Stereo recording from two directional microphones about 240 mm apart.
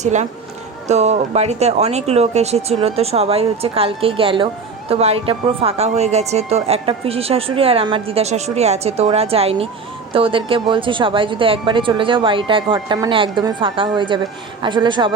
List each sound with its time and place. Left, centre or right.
0.0 s speech: right